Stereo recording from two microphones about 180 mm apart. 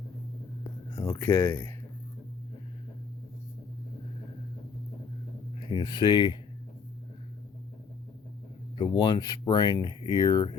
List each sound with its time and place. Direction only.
0.9 s speech: 15° left (ahead or behind)
5.5 s speech: 25° left (ahead or behind)
8.8 s speech: 25° left (ahead or behind)